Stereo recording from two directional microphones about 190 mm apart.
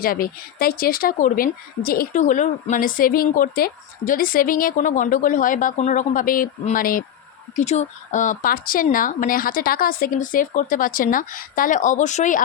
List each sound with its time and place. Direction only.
0.0 s speech: 50° left (ahead or behind)
7.5 s speech: 35° left (ahead or behind)